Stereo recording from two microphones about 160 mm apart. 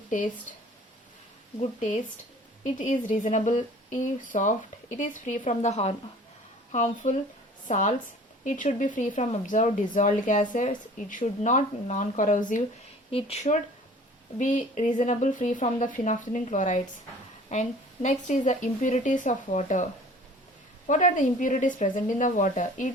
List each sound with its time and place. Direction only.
2.7 s speech: 50° left (ahead or behind)
13.1 s speech: 35° left (ahead or behind); by 22.9 s 55° left (ahead or behind)